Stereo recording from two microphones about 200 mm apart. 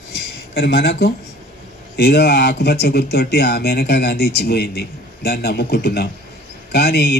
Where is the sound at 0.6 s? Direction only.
50° left (ahead or behind).